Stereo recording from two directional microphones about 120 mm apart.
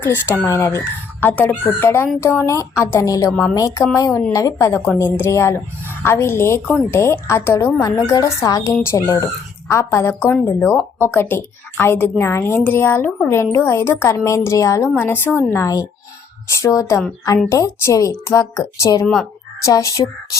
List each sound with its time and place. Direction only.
0.0 s a woman's voice: 20° left (ahead or behind)
19.0 s speech: 5° left (ahead or behind)
19.6 s a woman's voice: 25° left (ahead or behind)